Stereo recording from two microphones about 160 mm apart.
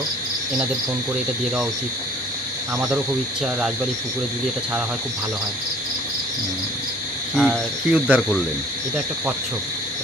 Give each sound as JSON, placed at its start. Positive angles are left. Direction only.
{"t": 7.3, "sound": "speech", "side_deg": 0}